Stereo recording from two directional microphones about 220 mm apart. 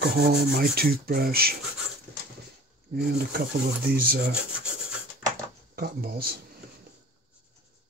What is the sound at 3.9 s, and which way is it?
Speech, 40° right (ahead or behind).